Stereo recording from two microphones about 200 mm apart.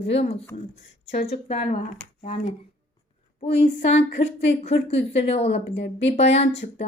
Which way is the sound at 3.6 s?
35° left (ahead or behind).